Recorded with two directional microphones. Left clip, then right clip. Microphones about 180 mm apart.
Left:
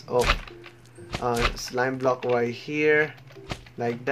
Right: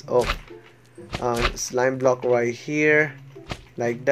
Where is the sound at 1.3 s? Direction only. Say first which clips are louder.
Right 1 dB; centre (ahead or behind).